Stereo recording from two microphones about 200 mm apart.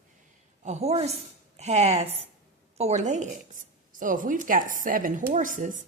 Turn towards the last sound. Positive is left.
turn(degrees=-40)  # may be behind; listen again after turning